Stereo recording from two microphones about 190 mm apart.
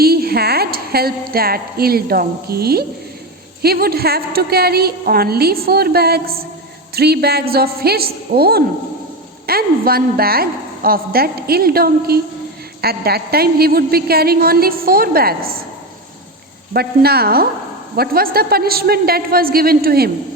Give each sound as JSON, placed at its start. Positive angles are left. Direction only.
{"t": 0.0, "sound": "a woman's voice", "side_deg": -55}
{"t": 16.7, "sound": "a woman's voice", "side_deg": -55}